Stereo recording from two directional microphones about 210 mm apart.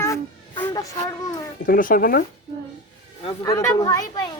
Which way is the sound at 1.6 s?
40° left (ahead or behind).